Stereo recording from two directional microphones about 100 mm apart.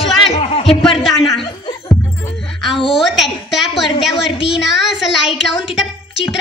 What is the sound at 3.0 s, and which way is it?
A woman's voice, centre (ahead or behind).